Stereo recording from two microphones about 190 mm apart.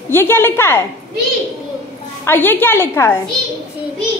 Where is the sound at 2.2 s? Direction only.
10° left (ahead or behind).